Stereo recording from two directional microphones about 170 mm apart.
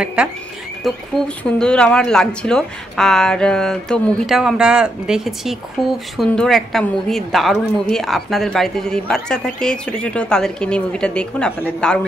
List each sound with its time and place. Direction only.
0.0 s speech: 5° right (ahead or behind)